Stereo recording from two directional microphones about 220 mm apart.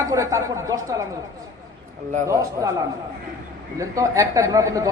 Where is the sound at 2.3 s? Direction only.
15° right (ahead or behind).